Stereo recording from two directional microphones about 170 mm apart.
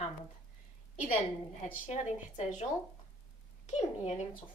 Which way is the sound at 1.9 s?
40° left (ahead or behind).